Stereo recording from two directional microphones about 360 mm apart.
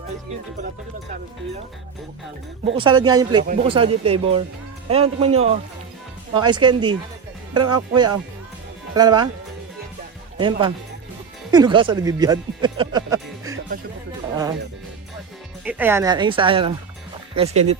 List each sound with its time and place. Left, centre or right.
2.7 s speech: centre
10.3 s speech: centre
15.6 s speech: centre